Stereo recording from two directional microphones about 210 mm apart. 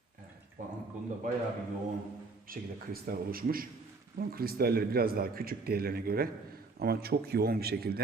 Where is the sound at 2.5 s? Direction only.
45° right (ahead or behind).